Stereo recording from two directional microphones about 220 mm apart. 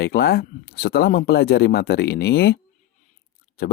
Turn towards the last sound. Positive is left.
turn(degrees=45)  # may be behind; listen again after turning